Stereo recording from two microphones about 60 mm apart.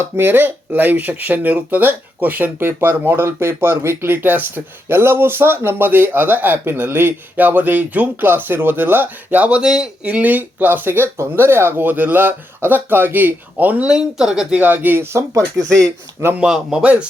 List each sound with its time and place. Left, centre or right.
0.0 s speech: right
9.6 s speech: centre
10.0 s speech: right
13.8 s speech: centre
14.6 s speech: right
16.4 s speech: centre
16.8 s speech: right